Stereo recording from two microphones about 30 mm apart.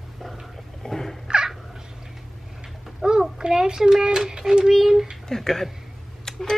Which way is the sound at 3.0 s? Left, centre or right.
Right.